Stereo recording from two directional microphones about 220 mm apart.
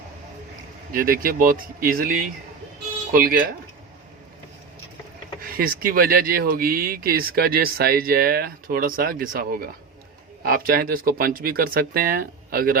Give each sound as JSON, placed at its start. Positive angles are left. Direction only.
{"t": 0.9, "sound": "speech", "side_deg": -40}
{"t": 5.5, "sound": "speech", "side_deg": -40}